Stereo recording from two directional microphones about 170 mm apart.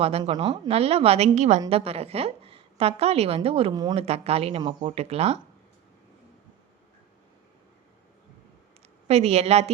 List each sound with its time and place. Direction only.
0.0 s a woman's voice: 35° right (ahead or behind)
3.9 s a woman's voice: 35° right (ahead or behind)
9.0 s a woman's voice: 40° right (ahead or behind)